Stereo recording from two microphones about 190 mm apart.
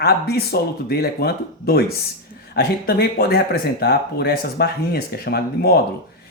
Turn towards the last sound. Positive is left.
turn(degrees=55)  # may be behind; listen again after turning